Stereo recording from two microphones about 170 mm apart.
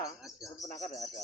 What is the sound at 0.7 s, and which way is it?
Speech, 45° left (ahead or behind).